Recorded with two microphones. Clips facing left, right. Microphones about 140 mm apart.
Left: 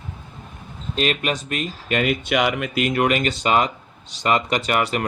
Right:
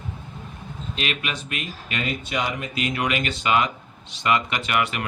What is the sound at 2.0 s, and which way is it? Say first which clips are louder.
Speech: left 5 dB; 70° left (ahead or behind).